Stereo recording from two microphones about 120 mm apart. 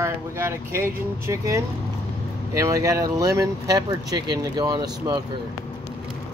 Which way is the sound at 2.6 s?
25° right (ahead or behind).